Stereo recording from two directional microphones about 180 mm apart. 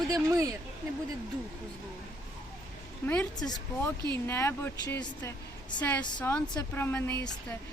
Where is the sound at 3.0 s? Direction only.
5° left (ahead or behind); by 5.3 s 20° left (ahead or behind).